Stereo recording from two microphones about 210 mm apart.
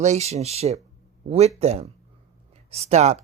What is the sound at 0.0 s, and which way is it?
Speech, 30° right (ahead or behind).